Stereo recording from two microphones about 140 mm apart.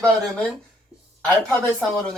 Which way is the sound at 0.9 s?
20° left (ahead or behind).